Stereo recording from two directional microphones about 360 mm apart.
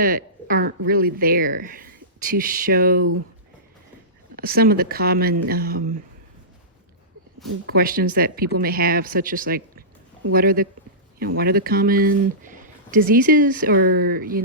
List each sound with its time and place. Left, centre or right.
0.0 s speech: right
4.4 s speech: right
7.7 s speech: right